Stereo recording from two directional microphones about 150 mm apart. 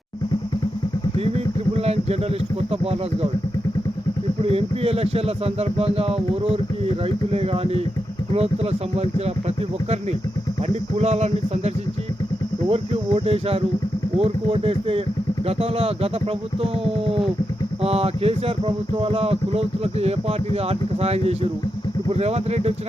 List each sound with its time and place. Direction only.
1.8 s speech: 45° right (ahead or behind)
4.5 s speech: 40° right (ahead or behind)
10.9 s speech: 45° right (ahead or behind)
12.7 s speech: 40° right (ahead or behind)
17.8 s speech: 40° right (ahead or behind)